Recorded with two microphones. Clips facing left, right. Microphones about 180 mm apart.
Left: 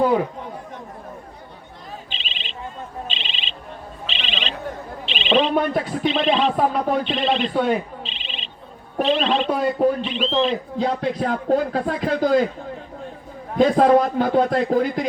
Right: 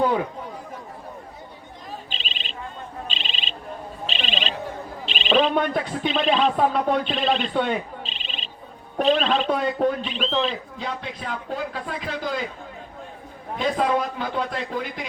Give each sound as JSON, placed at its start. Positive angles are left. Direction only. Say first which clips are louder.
{"t": 2.0, "sound": "bird", "louder": "even", "side_deg": -40}
{"t": 3.1, "sound": "a sound", "louder": "even", "side_deg": -40}
{"t": 5.3, "sound": "a man's voice", "louder": "left 2 dB", "side_deg": 0}
{"t": 8.0, "sound": "a sound", "louder": "left 1 dB", "side_deg": -40}
{"t": 9.0, "sound": "a man's voice", "louder": "left 1 dB", "side_deg": 0}
{"t": 10.8, "sound": "speech", "louder": "left 10 dB", "side_deg": 40}
{"t": 13.6, "sound": "speech", "louder": "left 8 dB", "side_deg": 45}